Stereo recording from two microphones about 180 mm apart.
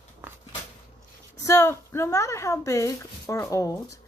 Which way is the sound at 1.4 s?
15° left (ahead or behind).